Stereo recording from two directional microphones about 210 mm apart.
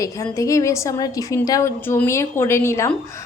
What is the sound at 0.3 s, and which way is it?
A woman's voice, 15° left (ahead or behind).